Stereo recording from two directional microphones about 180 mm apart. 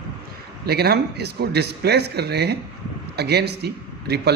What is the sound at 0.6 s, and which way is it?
A man's voice, 60° right (ahead or behind).